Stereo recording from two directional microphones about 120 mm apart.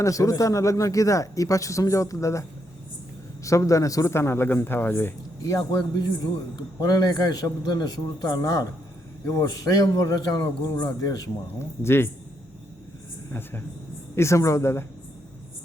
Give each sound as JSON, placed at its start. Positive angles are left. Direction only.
{"t": 0.0, "sound": "speech", "side_deg": 25}
{"t": 6.7, "sound": "a man's voice", "side_deg": 35}
{"t": 11.8, "sound": "speech", "side_deg": 20}
{"t": 13.3, "sound": "a woman's voice", "side_deg": 20}